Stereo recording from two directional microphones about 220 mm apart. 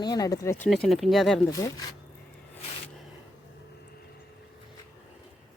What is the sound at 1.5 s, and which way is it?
Speech, 15° left (ahead or behind).